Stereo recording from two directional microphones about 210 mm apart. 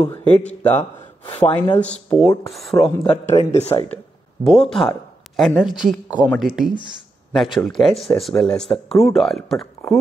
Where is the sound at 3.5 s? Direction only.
30° left (ahead or behind).